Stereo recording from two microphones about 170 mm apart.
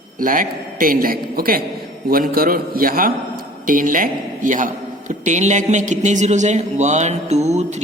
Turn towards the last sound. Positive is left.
turn(degrees=-40)  # may be behind; listen again after turning